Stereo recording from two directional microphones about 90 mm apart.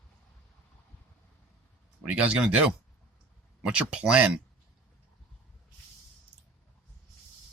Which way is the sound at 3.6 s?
15° right (ahead or behind).